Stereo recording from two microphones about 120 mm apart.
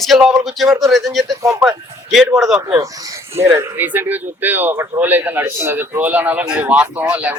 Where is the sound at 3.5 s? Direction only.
15° right (ahead or behind).